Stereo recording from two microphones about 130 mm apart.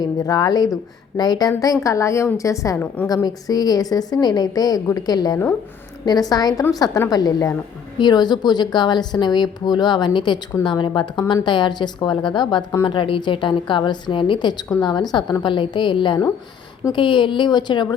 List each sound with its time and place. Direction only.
0.0 s a woman's voice: 30° left (ahead or behind)